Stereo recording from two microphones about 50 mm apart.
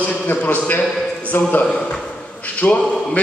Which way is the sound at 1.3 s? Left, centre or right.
Left.